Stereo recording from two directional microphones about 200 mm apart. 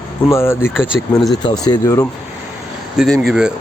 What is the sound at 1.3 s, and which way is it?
Speech, 20° left (ahead or behind).